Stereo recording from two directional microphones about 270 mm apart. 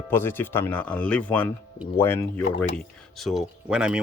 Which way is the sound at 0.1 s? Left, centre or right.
Centre.